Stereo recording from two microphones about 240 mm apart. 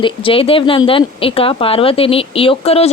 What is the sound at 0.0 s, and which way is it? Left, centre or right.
Speech, left.